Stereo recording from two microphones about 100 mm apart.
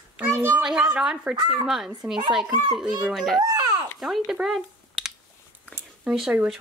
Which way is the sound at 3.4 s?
45° right (ahead or behind).